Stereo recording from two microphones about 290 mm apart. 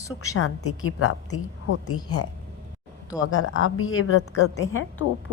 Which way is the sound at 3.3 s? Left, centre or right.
Left.